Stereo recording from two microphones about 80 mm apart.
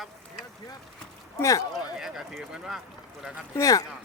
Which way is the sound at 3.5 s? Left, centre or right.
Left.